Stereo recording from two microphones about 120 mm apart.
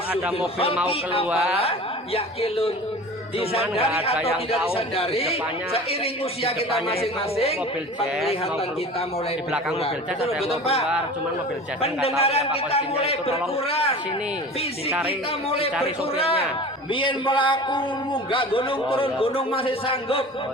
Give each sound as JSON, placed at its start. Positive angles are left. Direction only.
{"t": 0.9, "sound": "a man's voice", "side_deg": 50}
{"t": 4.7, "sound": "a man's voice", "side_deg": 55}
{"t": 9.8, "sound": "a man's voice", "side_deg": 60}
{"t": 12.2, "sound": "a man's voice", "side_deg": 60}
{"t": 15.4, "sound": "a man's voice", "side_deg": 55}
{"t": 16.9, "sound": "a man's voice", "side_deg": 45}